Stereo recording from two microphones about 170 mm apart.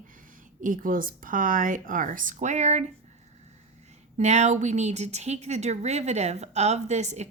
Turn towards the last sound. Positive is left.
turn(degrees=-40)  # may be behind; listen again after turning